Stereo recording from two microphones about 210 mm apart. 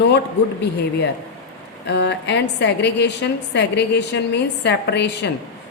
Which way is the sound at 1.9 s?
55° left (ahead or behind).